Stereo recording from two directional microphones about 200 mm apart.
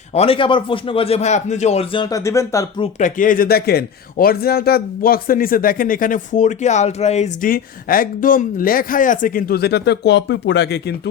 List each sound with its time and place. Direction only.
0.1 s a man's voice: 30° left (ahead or behind)
2.8 s speech: 40° left (ahead or behind)
7.5 s speech: 45° left (ahead or behind)